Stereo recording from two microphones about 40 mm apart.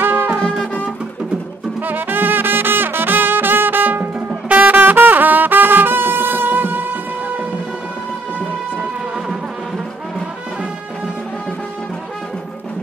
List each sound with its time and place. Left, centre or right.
0.0 s music: right
1.8 s music: right